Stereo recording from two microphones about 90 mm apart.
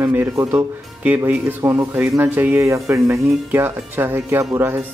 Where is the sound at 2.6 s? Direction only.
35° right (ahead or behind).